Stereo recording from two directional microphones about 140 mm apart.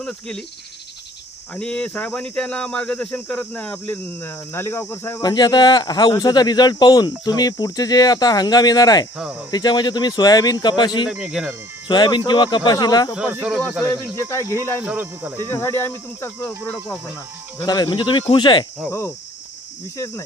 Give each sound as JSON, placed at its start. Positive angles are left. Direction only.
{"t": 0.0, "sound": "cricket", "side_deg": 5}
{"t": 1.5, "sound": "speech", "side_deg": 5}
{"t": 5.3, "sound": "speech", "side_deg": 30}
{"t": 11.1, "sound": "speech", "side_deg": -5}
{"t": 11.9, "sound": "speech", "side_deg": 35}
{"t": 13.3, "sound": "speech", "side_deg": -10}
{"t": 13.9, "sound": "speech", "side_deg": 20}
{"t": 14.8, "sound": "speech", "side_deg": -10}
{"t": 15.4, "sound": "speech", "side_deg": 20}
{"t": 17.7, "sound": "speech", "side_deg": 30}
{"t": 18.9, "sound": "speech", "side_deg": 20}